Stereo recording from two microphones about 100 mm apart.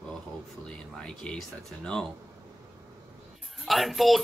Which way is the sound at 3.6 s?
Centre (ahead or behind).